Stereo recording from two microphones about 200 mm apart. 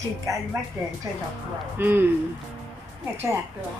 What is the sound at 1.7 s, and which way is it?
Speech, 10° right (ahead or behind).